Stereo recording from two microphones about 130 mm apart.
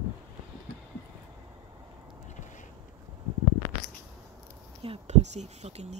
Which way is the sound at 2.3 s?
70° left (ahead or behind).